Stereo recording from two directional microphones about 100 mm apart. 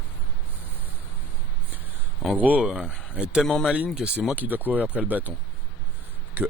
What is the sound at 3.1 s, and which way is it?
Speech, 10° right (ahead or behind).